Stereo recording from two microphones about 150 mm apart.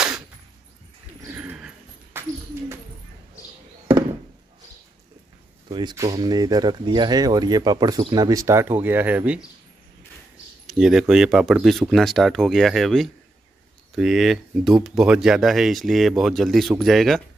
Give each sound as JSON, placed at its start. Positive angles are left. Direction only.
{"t": 1.2, "sound": "dog", "side_deg": -10}
{"t": 2.1, "sound": "a sound", "side_deg": -15}
{"t": 5.7, "sound": "speech", "side_deg": -30}
{"t": 10.7, "sound": "speech", "side_deg": -5}